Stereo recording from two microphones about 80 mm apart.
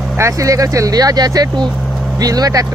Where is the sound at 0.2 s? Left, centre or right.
Right.